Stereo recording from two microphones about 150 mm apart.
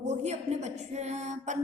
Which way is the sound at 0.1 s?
50° right (ahead or behind).